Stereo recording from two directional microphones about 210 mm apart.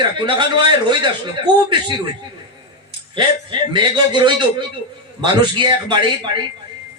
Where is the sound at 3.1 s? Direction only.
20° right (ahead or behind).